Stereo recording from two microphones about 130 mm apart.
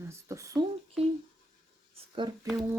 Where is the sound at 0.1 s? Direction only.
25° right (ahead or behind).